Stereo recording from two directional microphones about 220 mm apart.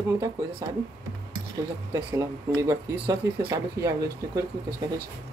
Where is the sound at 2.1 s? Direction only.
15° right (ahead or behind).